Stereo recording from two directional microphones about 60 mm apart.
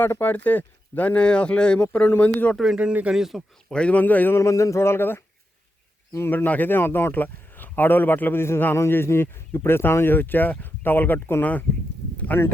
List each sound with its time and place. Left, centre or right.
0.0 s speech: left
2.0 s speech: left
2.7 s speech: centre
3.2 s speech: centre
3.7 s speech: centre
4.4 s a sound: left
6.3 s speech: left
12.1 s a sound: left